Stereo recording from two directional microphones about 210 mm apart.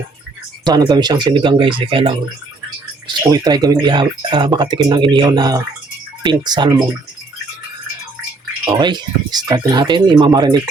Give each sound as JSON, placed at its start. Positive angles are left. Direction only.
{"t": 0.6, "sound": "speech", "side_deg": -20}
{"t": 8.8, "sound": "speech", "side_deg": -20}